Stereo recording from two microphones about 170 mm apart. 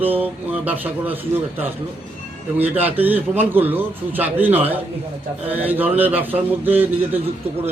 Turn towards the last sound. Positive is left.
turn(degrees=-10)  # may be behind; listen again after turning